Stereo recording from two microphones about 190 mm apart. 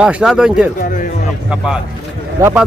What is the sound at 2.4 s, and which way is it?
Speech, 5° right (ahead or behind).